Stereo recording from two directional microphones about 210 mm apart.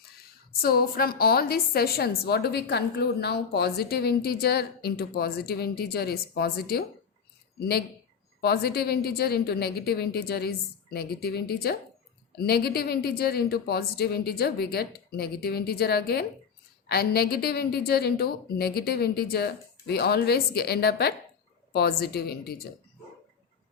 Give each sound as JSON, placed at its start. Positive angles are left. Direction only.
{"t": 0.6, "sound": "a woman's voice", "side_deg": 45}